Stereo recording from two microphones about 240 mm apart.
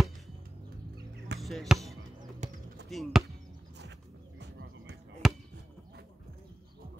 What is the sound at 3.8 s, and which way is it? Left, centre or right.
Music, right.